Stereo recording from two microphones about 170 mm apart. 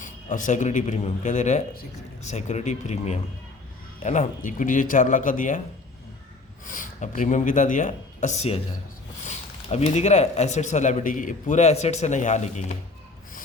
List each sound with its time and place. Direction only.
0.0 s speech: 50° left (ahead or behind)
6.7 s speech: 50° left (ahead or behind)